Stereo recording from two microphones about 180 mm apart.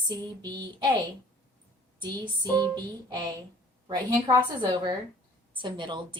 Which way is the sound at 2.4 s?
20° right (ahead or behind).